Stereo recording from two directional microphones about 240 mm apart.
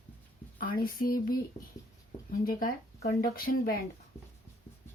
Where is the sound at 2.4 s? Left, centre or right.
Left.